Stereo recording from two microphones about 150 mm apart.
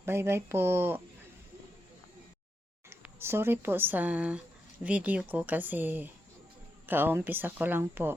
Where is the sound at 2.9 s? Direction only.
15° right (ahead or behind).